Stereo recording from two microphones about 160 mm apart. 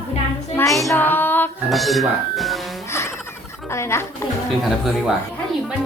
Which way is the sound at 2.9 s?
15° left (ahead or behind).